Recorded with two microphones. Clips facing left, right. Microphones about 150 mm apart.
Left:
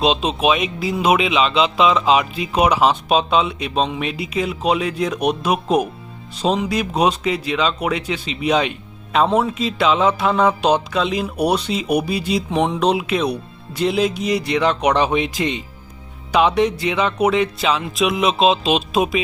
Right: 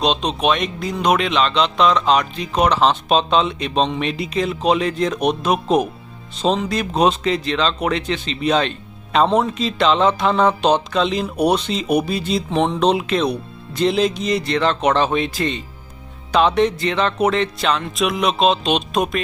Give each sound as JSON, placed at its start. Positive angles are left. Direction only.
{"t": 0.0, "sound": "speech", "side_deg": 5}